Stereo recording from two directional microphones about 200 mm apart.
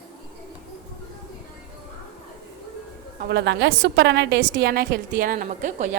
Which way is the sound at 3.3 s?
60° right (ahead or behind).